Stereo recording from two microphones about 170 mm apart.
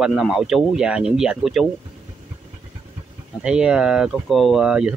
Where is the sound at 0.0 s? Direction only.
Centre (ahead or behind).